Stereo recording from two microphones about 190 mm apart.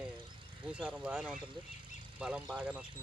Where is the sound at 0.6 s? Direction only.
5° right (ahead or behind).